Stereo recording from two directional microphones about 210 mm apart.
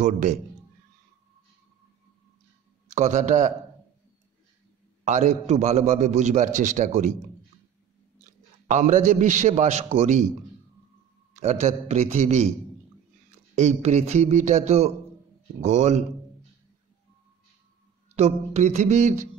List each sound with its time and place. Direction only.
0.0 s a man's voice: 35° right (ahead or behind)
2.9 s a man's voice: 35° right (ahead or behind)
5.0 s a man's voice: 35° right (ahead or behind)
8.6 s a man's voice: 35° right (ahead or behind)
11.3 s a man's voice: 35° right (ahead or behind)
13.6 s a man's voice: 35° right (ahead or behind)
18.1 s a man's voice: 30° right (ahead or behind)